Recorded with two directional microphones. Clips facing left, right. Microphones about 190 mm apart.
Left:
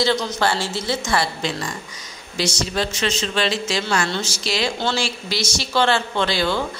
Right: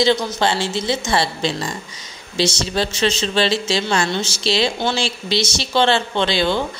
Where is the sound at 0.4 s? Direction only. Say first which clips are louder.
Right 2 dB; 20° right (ahead or behind).